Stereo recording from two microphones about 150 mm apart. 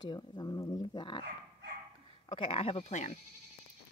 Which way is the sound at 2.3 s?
40° left (ahead or behind).